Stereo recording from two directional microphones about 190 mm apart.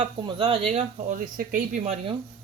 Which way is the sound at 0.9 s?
45° right (ahead or behind).